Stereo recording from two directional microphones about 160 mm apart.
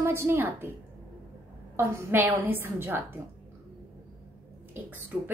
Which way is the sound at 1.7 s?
15° right (ahead or behind).